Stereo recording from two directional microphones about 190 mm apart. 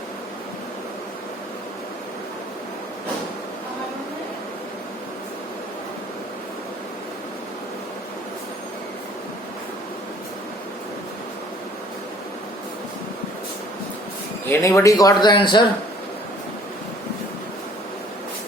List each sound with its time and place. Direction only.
14.5 s speech: 15° left (ahead or behind)